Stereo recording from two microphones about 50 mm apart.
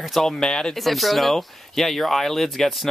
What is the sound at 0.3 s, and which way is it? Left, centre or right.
Speech, centre.